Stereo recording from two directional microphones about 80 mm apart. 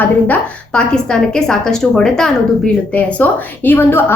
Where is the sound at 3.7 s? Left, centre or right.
Left.